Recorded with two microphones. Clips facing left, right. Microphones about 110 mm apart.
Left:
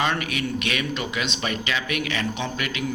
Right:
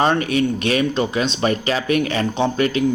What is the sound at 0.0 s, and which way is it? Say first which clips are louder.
Speech: right 8 dB; 35° right (ahead or behind).